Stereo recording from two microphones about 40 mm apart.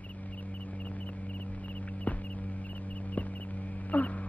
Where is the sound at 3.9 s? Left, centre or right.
Left.